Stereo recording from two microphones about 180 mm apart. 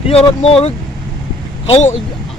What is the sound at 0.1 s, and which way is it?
Speech, 30° left (ahead or behind).